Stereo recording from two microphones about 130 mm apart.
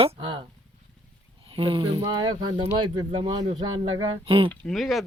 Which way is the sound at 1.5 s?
45° right (ahead or behind).